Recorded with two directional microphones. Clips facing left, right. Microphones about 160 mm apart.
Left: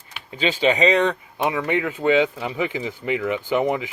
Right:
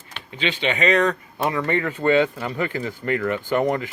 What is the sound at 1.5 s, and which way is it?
Speech, 10° left (ahead or behind).